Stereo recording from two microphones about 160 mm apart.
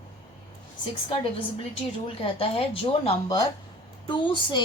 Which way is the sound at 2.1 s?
35° left (ahead or behind).